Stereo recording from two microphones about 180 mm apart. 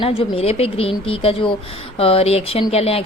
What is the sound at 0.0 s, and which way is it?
A woman's voice, 30° left (ahead or behind).